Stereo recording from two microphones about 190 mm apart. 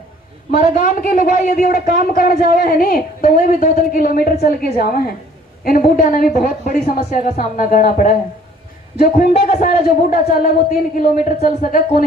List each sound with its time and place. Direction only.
0.7 s a man's voice: 45° left (ahead or behind)